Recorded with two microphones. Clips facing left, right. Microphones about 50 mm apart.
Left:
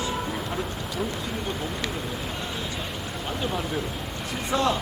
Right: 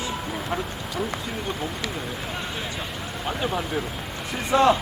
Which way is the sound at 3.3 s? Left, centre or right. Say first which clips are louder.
Right 3 dB; centre.